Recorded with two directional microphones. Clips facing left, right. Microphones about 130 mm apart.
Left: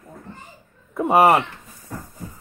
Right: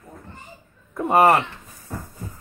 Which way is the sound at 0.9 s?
10° left (ahead or behind).